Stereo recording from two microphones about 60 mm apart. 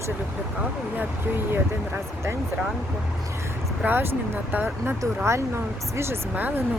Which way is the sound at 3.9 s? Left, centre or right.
Right.